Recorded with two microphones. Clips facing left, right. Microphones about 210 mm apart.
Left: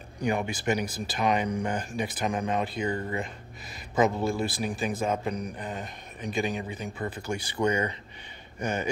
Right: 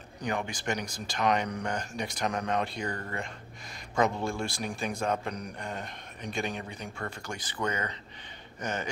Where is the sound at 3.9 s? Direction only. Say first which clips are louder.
Left 3 dB; 5° left (ahead or behind).